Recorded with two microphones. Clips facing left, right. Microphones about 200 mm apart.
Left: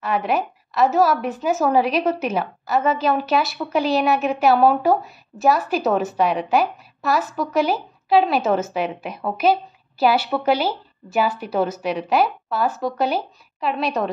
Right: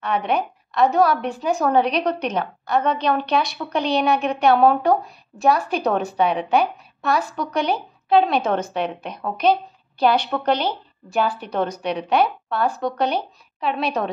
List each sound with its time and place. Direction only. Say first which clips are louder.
0.0 s a woman's voice: even; centre (ahead or behind)